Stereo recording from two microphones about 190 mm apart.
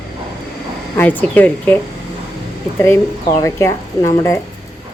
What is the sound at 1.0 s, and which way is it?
Speech, 10° left (ahead or behind).